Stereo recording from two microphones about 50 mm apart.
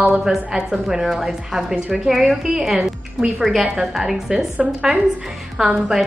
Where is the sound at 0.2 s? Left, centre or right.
Centre.